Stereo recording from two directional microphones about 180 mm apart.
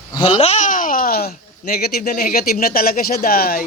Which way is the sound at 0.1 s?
25° left (ahead or behind).